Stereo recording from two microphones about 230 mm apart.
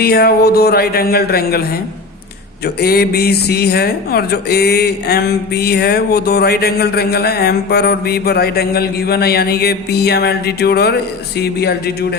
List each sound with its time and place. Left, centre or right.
0.0 s speech: left
2.8 s speech: left